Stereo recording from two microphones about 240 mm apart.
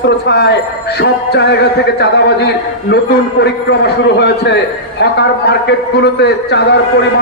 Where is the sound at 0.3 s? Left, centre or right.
Left.